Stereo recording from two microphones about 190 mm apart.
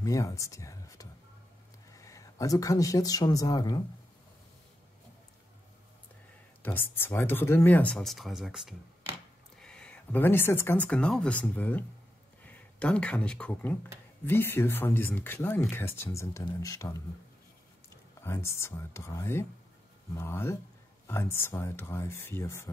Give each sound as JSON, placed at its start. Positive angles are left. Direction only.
{"t": 0.0, "sound": "speech", "side_deg": 15}
{"t": 6.6, "sound": "speech", "side_deg": 10}